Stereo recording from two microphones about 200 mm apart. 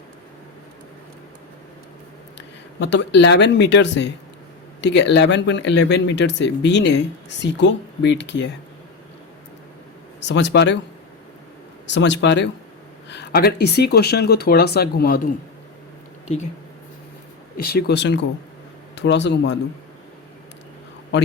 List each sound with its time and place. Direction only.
2.7 s speech: 60° left (ahead or behind)
10.2 s speech: 60° left (ahead or behind)
11.9 s speech: 65° left (ahead or behind)
16.2 s speech: 35° left (ahead or behind)
17.6 s speech: 50° left (ahead or behind)